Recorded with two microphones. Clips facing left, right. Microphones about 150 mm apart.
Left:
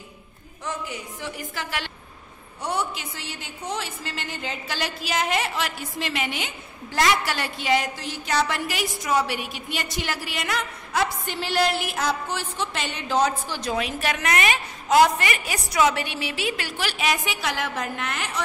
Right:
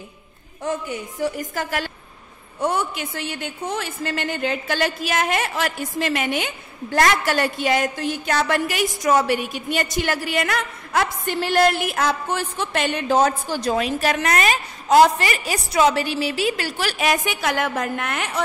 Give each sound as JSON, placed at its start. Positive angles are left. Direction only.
{"t": 0.7, "sound": "a woman's voice", "side_deg": -45}